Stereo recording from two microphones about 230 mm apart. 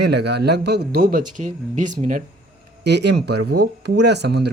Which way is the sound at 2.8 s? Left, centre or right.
Right.